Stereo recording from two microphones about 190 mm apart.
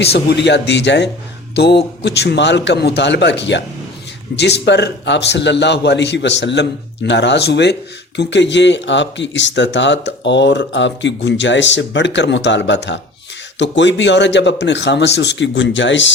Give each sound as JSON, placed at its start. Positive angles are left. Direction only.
{"t": 0.0, "sound": "a man's voice", "side_deg": 60}